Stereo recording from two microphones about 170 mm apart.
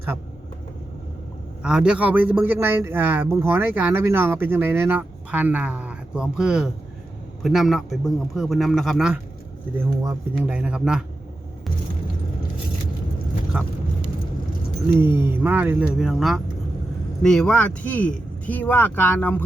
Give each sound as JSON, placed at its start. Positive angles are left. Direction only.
{"t": 1.6, "sound": "a man's voice", "side_deg": -5}
{"t": 9.7, "sound": "a man's voice", "side_deg": -15}
{"t": 14.8, "sound": "a man's voice", "side_deg": -15}